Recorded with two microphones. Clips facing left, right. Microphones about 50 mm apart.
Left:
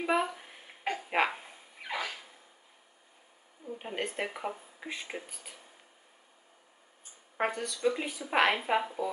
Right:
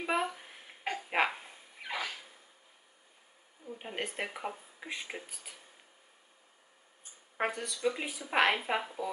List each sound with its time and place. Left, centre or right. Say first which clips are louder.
0.0 s a sound: left 3 dB; centre
3.7 s speech: left 3 dB; centre
7.3 s speech: left 2 dB; centre